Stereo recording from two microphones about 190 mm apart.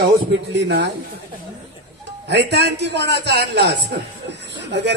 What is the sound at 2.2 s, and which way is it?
A man's voice, 60° right (ahead or behind).